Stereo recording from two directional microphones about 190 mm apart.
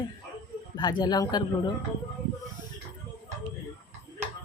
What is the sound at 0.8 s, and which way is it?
Speech, 20° left (ahead or behind).